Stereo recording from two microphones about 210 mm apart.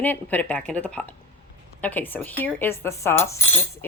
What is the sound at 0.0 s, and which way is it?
A woman's voice, 10° left (ahead or behind).